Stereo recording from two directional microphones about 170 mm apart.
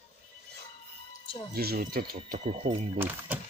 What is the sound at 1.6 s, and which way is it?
Speech, 65° right (ahead or behind).